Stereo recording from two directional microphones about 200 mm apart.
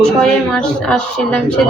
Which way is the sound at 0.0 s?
5° left (ahead or behind).